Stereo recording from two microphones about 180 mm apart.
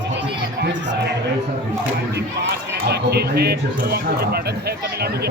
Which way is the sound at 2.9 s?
65° right (ahead or behind).